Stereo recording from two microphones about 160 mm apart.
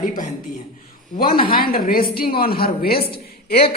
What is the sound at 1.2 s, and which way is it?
A man's voice, 65° left (ahead or behind).